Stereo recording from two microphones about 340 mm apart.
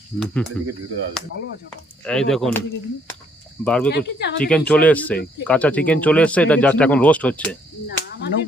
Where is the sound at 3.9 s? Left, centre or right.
Left.